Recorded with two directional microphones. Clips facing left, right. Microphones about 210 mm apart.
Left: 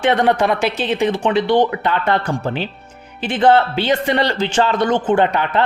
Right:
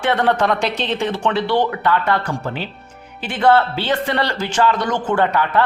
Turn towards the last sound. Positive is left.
turn(degrees=20)  # may be behind; listen again after turning